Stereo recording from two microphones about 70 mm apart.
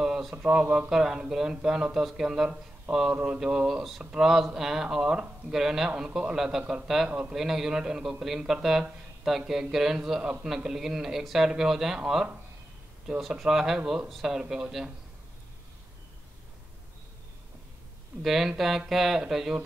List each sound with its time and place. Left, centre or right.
0.0 s speech: centre
7.1 s speech: centre
7.3 s speech: centre
13.3 s speech: centre
18.2 s speech: centre